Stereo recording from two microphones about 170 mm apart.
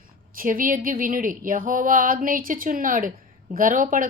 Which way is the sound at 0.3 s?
55° right (ahead or behind).